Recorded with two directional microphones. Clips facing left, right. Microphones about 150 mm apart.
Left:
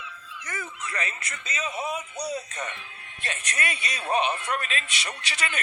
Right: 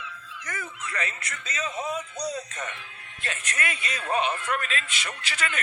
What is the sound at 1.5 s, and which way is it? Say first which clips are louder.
Speech: even; 15° left (ahead or behind).